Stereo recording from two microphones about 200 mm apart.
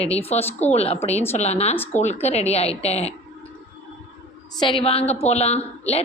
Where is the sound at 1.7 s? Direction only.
10° left (ahead or behind).